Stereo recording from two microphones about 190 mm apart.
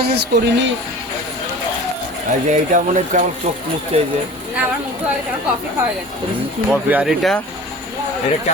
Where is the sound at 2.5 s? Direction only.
40° right (ahead or behind).